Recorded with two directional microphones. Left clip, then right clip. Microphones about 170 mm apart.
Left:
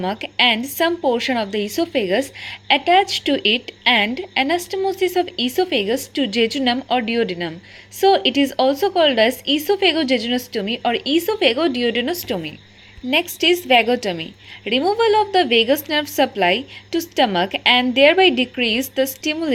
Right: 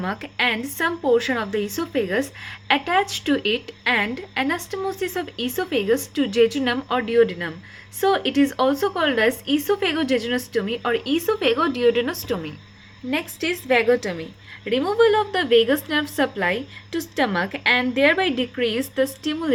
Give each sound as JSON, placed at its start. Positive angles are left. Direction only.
{"t": 0.0, "sound": "a woman's voice", "side_deg": 30}